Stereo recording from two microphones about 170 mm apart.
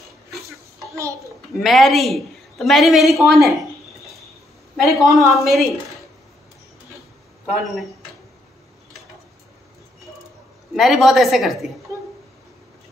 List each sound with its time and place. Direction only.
0.5 s a sound: 15° right (ahead or behind)
1.6 s a man's voice: centre (ahead or behind)
4.7 s a man's voice: centre (ahead or behind)
10.7 s a man's voice: centre (ahead or behind)